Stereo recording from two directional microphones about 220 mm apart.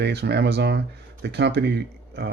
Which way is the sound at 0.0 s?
50° right (ahead or behind).